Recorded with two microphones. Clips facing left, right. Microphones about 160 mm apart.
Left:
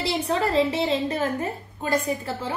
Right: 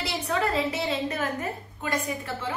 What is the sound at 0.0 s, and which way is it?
A woman's voice, 30° left (ahead or behind).